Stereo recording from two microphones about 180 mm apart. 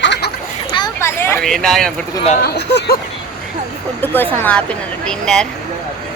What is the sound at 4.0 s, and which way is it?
Speech, 10° left (ahead or behind).